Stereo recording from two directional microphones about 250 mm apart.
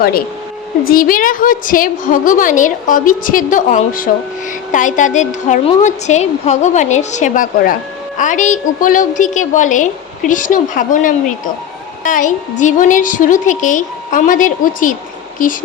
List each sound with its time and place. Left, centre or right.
0.9 s a woman's voice: left